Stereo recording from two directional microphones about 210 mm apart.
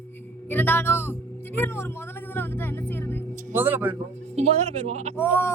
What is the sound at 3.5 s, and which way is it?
Speech, 10° right (ahead or behind).